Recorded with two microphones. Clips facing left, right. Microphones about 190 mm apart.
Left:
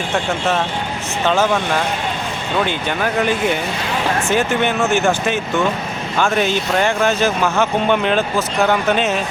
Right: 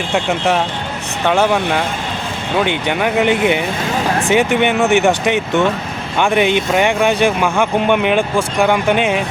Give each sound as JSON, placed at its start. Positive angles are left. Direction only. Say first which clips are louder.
{"t": 0.1, "sound": "speech", "louder": "right 3 dB", "side_deg": -15}
{"t": 2.6, "sound": "speech", "louder": "right 3 dB", "side_deg": -15}